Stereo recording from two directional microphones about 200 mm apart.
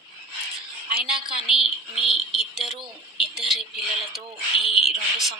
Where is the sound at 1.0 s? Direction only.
25° right (ahead or behind).